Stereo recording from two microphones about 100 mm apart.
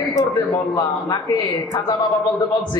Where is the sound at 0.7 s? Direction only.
35° left (ahead or behind).